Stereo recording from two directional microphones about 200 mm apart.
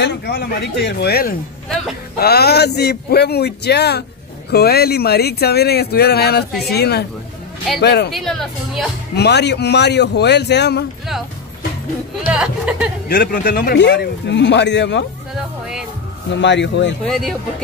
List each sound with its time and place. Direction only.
0.0 s speech: 55° left (ahead or behind)
8.1 s speech: centre (ahead or behind)
9.1 s speech: 55° left (ahead or behind)
12.3 s speech: 5° right (ahead or behind)
13.1 s speech: 45° left (ahead or behind)
16.3 s speech: 60° left (ahead or behind)
17.0 s speech: centre (ahead or behind)